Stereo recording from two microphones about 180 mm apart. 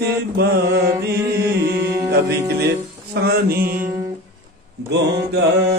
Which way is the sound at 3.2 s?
55° right (ahead or behind).